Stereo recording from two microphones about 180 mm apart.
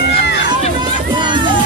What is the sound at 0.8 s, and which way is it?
Run, 25° right (ahead or behind).